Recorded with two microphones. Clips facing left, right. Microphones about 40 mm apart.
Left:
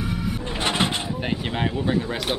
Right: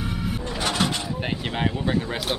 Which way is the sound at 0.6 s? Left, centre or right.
Left.